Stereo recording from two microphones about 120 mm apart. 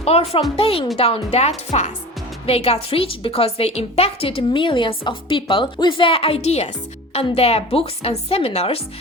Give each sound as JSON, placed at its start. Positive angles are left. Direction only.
{"t": 0.0, "sound": "a woman's voice", "side_deg": 55}